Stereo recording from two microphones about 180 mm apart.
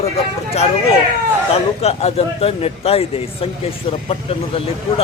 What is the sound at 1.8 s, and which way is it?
Speech, 35° left (ahead or behind).